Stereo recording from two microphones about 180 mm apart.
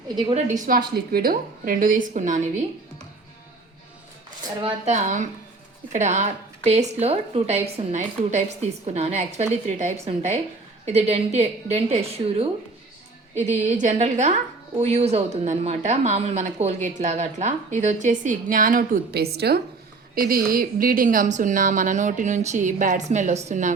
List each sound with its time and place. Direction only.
0.3 s a woman's voice: 45° right (ahead or behind)
4.6 s a woman's voice: 40° right (ahead or behind)